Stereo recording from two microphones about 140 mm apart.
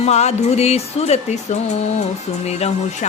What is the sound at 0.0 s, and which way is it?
A woman's voice, 50° left (ahead or behind).